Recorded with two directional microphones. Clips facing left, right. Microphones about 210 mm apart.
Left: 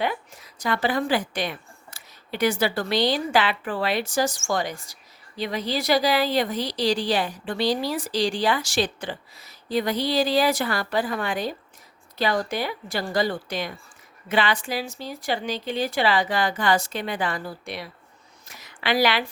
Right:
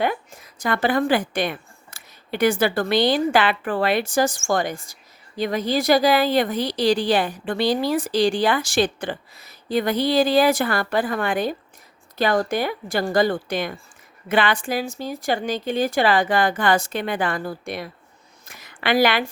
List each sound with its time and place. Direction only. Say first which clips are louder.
0.6 s a woman's voice: right 3 dB; 55° right (ahead or behind)